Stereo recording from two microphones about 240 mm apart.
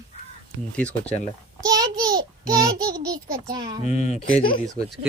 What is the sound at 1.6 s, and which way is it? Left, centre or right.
Speech, centre.